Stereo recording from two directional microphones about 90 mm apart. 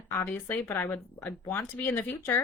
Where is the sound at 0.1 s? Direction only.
25° left (ahead or behind).